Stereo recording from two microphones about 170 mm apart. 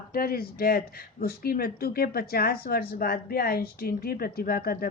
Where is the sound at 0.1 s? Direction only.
60° left (ahead or behind).